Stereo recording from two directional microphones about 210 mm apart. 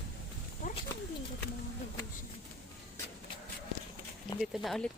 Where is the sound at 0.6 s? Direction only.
40° left (ahead or behind).